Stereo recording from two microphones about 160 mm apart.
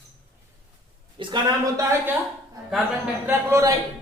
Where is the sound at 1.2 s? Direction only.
25° right (ahead or behind).